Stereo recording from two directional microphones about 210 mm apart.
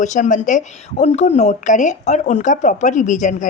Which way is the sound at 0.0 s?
35° left (ahead or behind).